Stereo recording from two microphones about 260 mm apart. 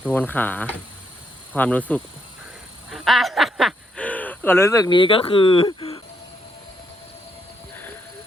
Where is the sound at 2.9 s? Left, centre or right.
Centre; by 6.0 s left.